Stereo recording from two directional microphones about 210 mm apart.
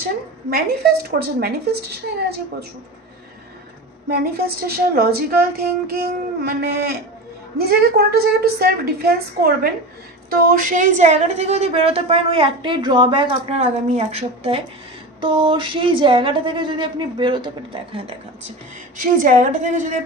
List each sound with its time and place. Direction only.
0.0 s a woman's voice: 45° right (ahead or behind)
4.1 s a woman's voice: 45° right (ahead or behind); by 17.5 s 20° right (ahead or behind)
18.9 s a woman's voice: 40° right (ahead or behind)